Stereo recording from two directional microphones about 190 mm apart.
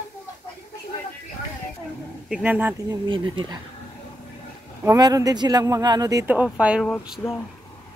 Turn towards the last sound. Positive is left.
turn(degrees=0)  # may be behind; listen again after turning